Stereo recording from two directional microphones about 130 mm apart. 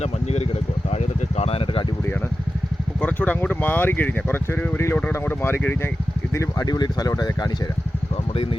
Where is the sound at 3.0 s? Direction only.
10° left (ahead or behind); by 7.4 s 30° left (ahead or behind).